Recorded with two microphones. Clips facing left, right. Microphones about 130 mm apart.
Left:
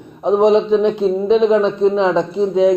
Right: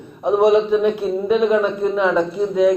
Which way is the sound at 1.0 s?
20° left (ahead or behind).